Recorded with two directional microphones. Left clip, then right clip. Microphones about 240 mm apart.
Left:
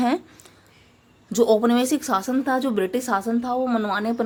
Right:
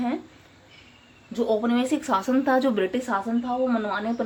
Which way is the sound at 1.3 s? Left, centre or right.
Left.